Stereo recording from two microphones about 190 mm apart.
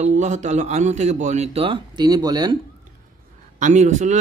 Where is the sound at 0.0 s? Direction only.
40° right (ahead or behind); by 2.5 s 20° right (ahead or behind).